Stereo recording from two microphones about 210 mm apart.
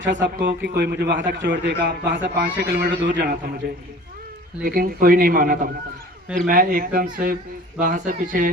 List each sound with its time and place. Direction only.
0.0 s a man's voice: 60° right (ahead or behind)
4.6 s a man's voice: 45° right (ahead or behind)